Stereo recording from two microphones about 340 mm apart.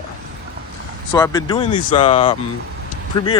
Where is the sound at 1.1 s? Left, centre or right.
Centre.